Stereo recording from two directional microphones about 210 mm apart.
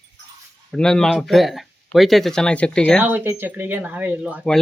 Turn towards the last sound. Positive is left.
turn(degrees=0)  # may be behind; listen again after turning